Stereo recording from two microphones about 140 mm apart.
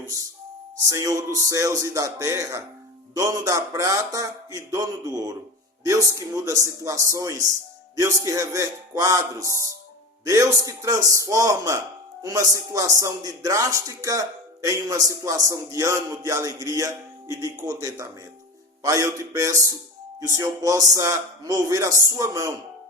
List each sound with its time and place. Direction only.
0.9 s speech: 25° right (ahead or behind)